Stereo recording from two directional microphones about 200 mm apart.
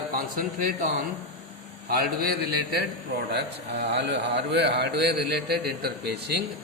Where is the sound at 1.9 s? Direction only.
50° right (ahead or behind).